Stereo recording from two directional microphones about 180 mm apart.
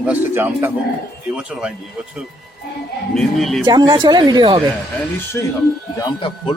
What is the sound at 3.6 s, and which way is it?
Speech, 25° right (ahead or behind).